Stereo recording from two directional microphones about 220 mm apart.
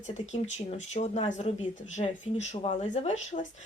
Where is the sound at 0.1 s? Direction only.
30° left (ahead or behind).